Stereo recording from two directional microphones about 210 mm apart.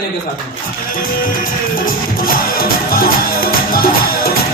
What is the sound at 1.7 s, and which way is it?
Music, 45° left (ahead or behind).